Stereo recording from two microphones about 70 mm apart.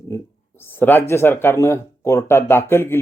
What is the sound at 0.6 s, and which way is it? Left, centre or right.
Speech, left.